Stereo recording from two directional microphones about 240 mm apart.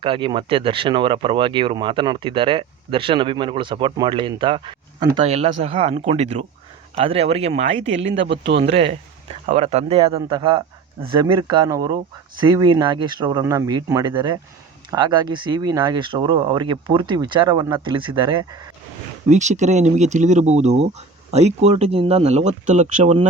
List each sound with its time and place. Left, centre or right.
0.0 s speech: right
8.0 s speech: right
8.4 s speech: right
19.3 s speech: right